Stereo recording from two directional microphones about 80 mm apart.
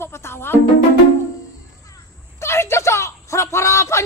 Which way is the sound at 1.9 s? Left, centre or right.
Left.